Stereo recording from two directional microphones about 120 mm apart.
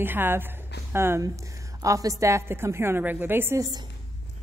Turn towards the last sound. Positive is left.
turn(degrees=-20)  # may be behind; listen again after turning